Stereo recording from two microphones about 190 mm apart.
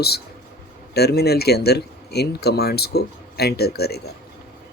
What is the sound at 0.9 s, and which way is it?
Speech, 55° left (ahead or behind).